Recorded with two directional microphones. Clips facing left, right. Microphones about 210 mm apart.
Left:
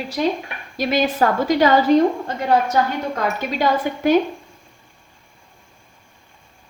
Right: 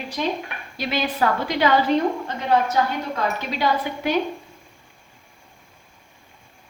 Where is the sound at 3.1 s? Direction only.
45° left (ahead or behind).